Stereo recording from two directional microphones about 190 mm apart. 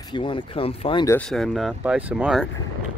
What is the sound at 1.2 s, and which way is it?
Speech, centre (ahead or behind).